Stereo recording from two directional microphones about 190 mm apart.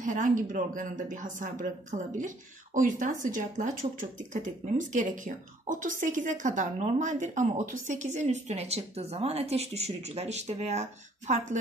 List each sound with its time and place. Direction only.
0.0 s speech: 45° right (ahead or behind)